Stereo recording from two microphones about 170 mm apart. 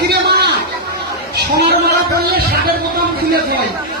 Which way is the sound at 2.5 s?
65° right (ahead or behind).